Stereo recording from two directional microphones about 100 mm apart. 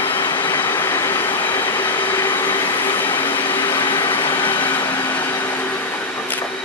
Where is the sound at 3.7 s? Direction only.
50° left (ahead or behind).